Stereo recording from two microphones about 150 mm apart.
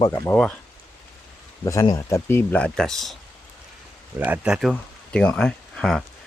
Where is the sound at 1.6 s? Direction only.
20° left (ahead or behind); by 3.2 s centre (ahead or behind).